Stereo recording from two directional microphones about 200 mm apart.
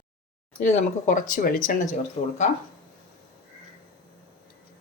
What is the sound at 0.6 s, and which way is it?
Speech, 40° left (ahead or behind).